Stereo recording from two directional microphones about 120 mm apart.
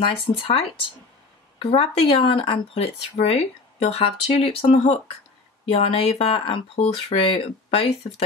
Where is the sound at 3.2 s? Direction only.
60° left (ahead or behind).